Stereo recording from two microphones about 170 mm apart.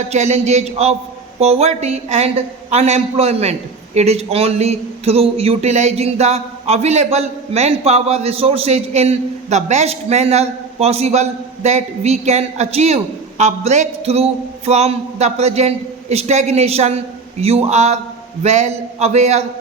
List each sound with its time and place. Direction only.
0.1 s speech: 40° right (ahead or behind)